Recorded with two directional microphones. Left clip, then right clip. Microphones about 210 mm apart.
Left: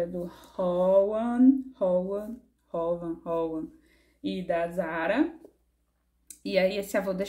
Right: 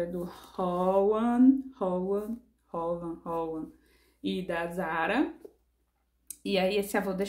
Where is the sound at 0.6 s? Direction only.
5° right (ahead or behind).